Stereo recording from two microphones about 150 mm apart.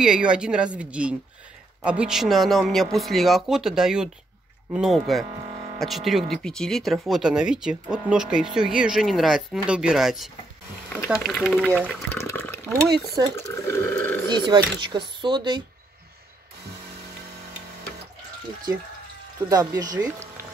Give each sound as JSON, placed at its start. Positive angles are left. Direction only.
{"t": 0.0, "sound": "speech", "side_deg": -5}
{"t": 12.1, "sound": "water", "side_deg": 15}
{"t": 13.2, "sound": "speech", "side_deg": -25}
{"t": 13.5, "sound": "water", "side_deg": 15}
{"t": 14.3, "sound": "speech", "side_deg": -30}
{"t": 19.5, "sound": "speech", "side_deg": -25}